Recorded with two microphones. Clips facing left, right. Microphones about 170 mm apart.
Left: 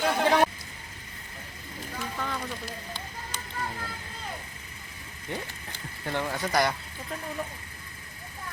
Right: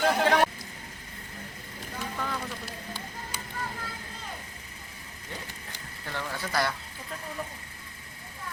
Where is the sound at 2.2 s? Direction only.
5° right (ahead or behind).